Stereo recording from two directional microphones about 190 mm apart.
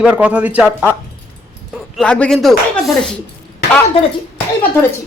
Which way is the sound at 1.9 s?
5° left (ahead or behind).